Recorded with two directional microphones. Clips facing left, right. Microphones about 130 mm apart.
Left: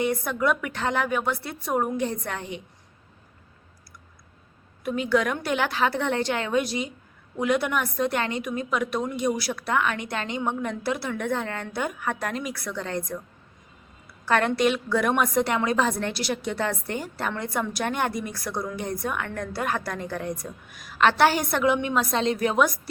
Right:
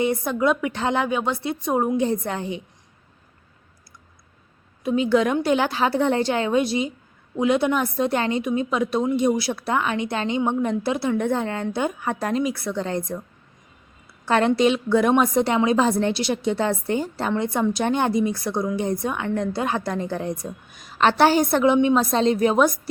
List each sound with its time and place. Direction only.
0.0 s a woman's voice: 30° right (ahead or behind)
4.8 s a woman's voice: 25° right (ahead or behind)
14.3 s a woman's voice: 25° right (ahead or behind)